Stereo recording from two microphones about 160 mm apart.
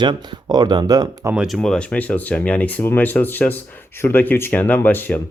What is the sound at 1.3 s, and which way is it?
Speech, 5° right (ahead or behind).